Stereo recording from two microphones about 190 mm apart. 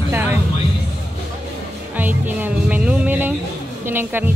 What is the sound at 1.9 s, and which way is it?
Speech, 10° right (ahead or behind).